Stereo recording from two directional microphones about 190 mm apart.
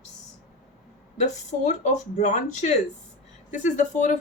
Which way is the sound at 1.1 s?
35° left (ahead or behind).